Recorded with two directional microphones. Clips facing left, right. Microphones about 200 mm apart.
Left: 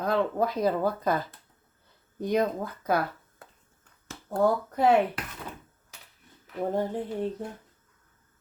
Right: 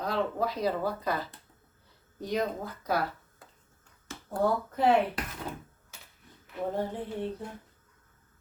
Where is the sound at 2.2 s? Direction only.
50° left (ahead or behind).